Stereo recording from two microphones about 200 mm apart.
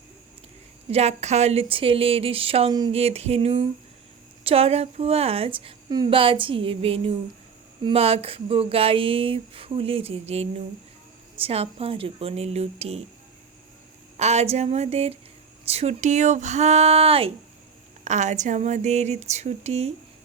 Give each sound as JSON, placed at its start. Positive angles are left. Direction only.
{"t": 0.9, "sound": "speech", "side_deg": -30}
{"t": 14.2, "sound": "speech", "side_deg": -35}